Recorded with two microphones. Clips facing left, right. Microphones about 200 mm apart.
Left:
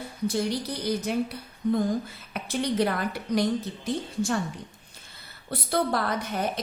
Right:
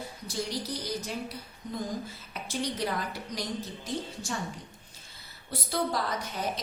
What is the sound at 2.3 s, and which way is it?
A woman's voice, 60° left (ahead or behind).